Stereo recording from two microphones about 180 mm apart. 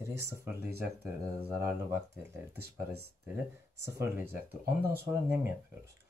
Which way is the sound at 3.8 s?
15° right (ahead or behind).